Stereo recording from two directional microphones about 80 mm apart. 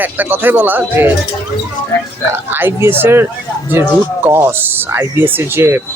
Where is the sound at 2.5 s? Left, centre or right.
Right.